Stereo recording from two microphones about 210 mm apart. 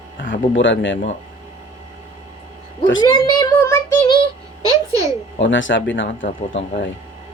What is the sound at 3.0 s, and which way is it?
Child singing, 20° left (ahead or behind).